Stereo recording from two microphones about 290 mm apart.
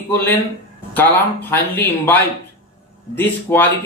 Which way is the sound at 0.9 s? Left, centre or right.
Centre.